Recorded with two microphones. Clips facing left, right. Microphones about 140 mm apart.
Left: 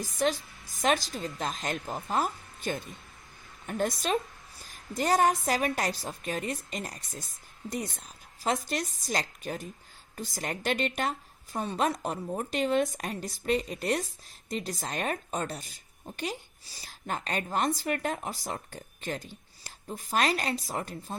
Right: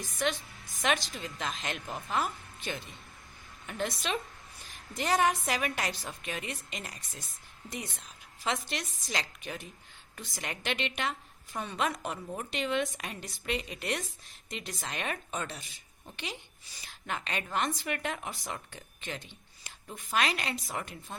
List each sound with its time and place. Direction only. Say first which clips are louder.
0.2 s a woman's voice: left 4 dB; 40° left (ahead or behind)